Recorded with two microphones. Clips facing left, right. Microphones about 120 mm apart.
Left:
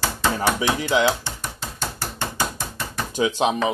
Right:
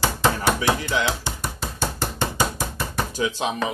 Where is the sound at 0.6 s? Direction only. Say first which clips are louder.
Left 3 dB; 15° left (ahead or behind).